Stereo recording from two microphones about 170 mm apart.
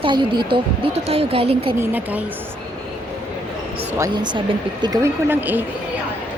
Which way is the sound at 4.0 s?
25° right (ahead or behind).